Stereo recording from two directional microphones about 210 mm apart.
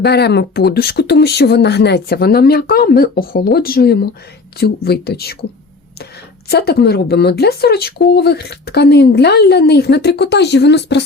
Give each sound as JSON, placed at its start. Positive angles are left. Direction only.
{"t": 0.0, "sound": "speech", "side_deg": 50}
{"t": 6.5, "sound": "speech", "side_deg": 50}